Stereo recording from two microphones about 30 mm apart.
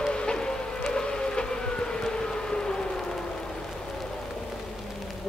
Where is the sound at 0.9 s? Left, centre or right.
Left.